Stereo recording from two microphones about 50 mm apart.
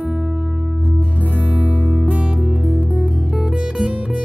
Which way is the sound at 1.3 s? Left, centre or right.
Right.